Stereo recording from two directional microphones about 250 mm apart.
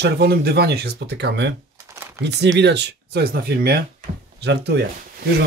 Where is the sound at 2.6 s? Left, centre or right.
Right.